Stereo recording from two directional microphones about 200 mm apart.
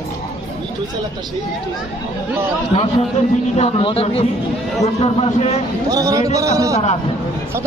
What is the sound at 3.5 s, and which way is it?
Speech, 30° left (ahead or behind).